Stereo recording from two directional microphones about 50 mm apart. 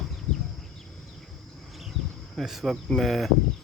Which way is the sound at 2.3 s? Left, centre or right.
Centre.